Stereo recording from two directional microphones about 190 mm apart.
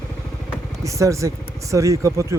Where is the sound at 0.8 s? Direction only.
15° right (ahead or behind).